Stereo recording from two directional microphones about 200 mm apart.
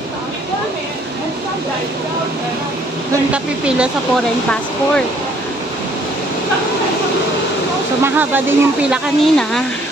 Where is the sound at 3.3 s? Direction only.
5° right (ahead or behind).